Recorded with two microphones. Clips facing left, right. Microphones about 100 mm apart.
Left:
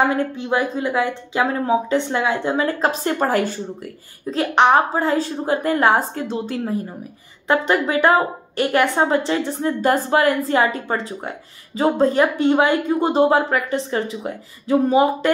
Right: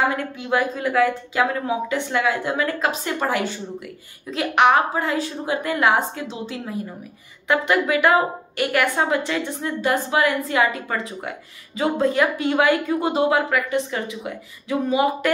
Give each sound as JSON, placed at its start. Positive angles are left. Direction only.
{"t": 0.1, "sound": "a woman's voice", "side_deg": 25}
{"t": 7.4, "sound": "a woman's voice", "side_deg": 30}